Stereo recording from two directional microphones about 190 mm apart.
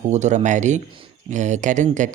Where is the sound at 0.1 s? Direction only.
40° right (ahead or behind).